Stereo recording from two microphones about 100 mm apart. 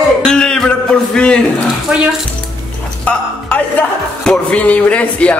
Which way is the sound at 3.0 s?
15° left (ahead or behind).